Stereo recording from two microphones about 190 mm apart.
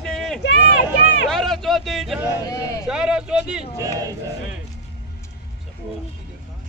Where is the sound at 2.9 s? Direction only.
5° right (ahead or behind).